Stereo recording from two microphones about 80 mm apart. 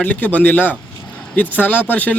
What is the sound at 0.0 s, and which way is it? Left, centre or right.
A man's voice, centre.